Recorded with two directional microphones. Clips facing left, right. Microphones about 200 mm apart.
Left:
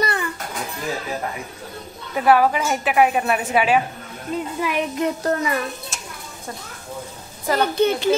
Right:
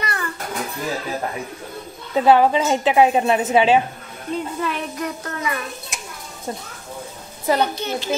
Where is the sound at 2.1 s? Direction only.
25° right (ahead or behind).